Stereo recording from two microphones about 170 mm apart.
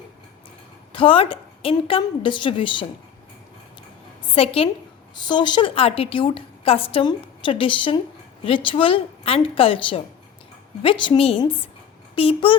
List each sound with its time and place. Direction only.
0.9 s a woman's voice: 30° left (ahead or behind)
4.4 s a woman's voice: 35° left (ahead or behind)